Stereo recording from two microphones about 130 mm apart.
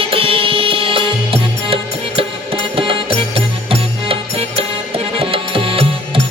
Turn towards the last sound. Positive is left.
turn(degrees=-45)  # may be behind; listen again after turning